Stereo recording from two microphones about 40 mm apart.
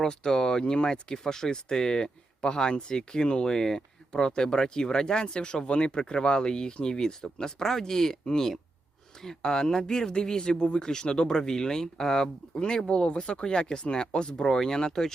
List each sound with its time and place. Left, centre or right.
0.0 s speech: centre